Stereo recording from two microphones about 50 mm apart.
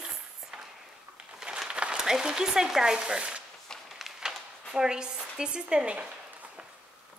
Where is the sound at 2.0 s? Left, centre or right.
Centre.